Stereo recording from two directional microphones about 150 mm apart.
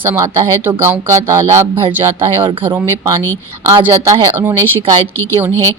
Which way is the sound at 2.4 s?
30° right (ahead or behind).